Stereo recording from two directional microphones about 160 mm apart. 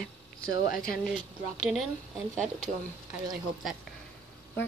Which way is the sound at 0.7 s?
65° left (ahead or behind).